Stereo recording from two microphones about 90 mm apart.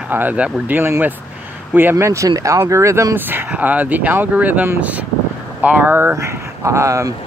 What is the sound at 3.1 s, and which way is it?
Speech, 20° right (ahead or behind).